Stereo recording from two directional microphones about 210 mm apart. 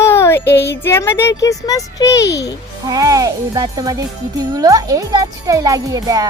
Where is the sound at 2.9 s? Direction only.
15° right (ahead or behind).